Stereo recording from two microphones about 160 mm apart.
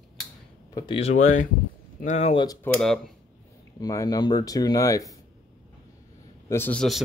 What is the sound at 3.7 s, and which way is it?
Speech, 20° left (ahead or behind).